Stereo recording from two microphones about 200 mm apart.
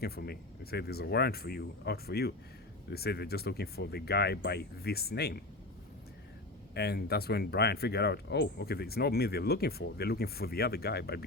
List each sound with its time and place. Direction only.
0.0 s speech: 50° left (ahead or behind)
6.7 s speech: 50° left (ahead or behind)